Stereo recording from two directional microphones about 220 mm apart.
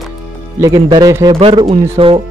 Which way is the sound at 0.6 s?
15° right (ahead or behind).